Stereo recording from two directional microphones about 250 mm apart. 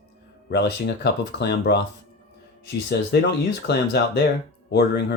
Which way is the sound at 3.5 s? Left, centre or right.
Left.